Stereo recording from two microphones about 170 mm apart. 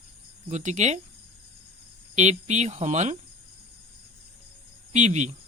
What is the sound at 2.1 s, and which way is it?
Speech, 45° right (ahead or behind).